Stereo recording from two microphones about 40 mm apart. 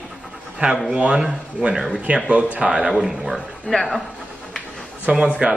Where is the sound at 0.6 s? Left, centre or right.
Right.